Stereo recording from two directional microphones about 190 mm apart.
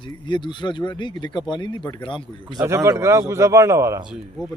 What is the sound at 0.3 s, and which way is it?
Speech, 25° left (ahead or behind).